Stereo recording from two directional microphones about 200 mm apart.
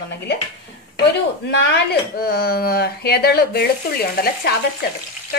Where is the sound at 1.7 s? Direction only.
55° left (ahead or behind).